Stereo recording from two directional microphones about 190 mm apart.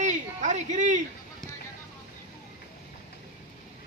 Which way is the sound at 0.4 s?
40° right (ahead or behind).